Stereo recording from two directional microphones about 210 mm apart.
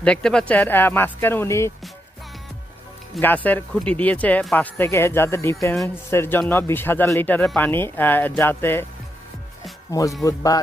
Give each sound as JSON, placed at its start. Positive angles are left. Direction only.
{"t": 0.0, "sound": "speech", "side_deg": 5}
{"t": 3.2, "sound": "speech", "side_deg": 10}
{"t": 9.9, "sound": "speech", "side_deg": 15}